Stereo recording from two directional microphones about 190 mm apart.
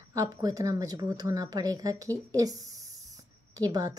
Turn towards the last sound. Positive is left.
turn(degrees=-20)  # may be behind; listen again after turning